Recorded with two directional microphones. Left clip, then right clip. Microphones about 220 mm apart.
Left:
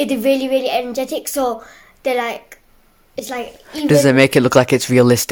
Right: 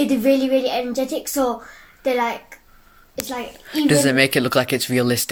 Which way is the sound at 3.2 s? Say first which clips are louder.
Left 3 dB; 25° left (ahead or behind).